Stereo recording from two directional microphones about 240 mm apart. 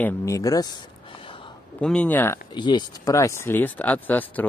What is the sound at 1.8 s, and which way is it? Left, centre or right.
Speech, centre.